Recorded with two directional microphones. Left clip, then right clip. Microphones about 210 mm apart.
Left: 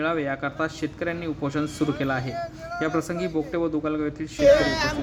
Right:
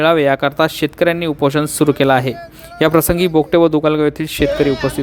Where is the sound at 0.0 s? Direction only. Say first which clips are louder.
Right 13 dB; 50° right (ahead or behind).